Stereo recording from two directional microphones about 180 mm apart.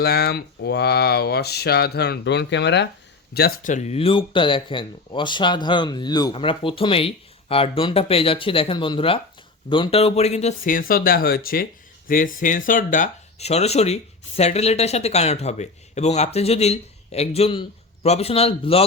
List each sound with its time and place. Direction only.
0.0 s speech: 60° left (ahead or behind)
3.3 s speech: 60° left (ahead or behind)
3.7 s speech: 40° left (ahead or behind)
10.6 s speech: 50° left (ahead or behind); by 18.9 s 30° left (ahead or behind)